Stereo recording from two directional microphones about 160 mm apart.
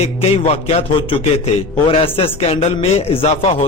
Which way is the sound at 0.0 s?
40° left (ahead or behind).